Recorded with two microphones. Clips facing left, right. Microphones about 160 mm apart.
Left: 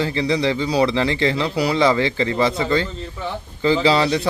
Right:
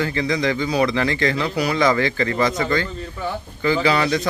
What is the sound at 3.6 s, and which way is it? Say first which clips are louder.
Speech: left 2 dB; 30° left (ahead or behind).